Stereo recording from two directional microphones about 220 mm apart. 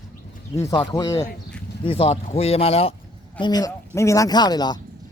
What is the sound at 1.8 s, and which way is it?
Speech, 25° left (ahead or behind).